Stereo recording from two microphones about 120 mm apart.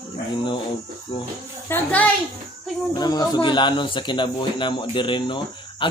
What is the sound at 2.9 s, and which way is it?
A man's voice, 35° left (ahead or behind).